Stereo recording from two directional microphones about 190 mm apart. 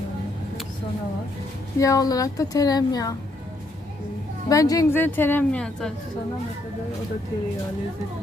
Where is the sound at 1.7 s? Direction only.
15° left (ahead or behind).